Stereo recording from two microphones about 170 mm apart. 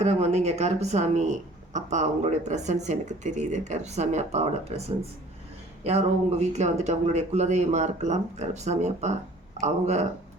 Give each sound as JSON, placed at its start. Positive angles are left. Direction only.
{"t": 0.0, "sound": "speech", "side_deg": -40}